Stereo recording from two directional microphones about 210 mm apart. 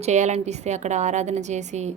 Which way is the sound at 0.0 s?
35° right (ahead or behind).